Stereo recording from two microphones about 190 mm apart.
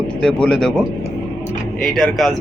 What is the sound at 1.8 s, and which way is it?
Speech, centre (ahead or behind).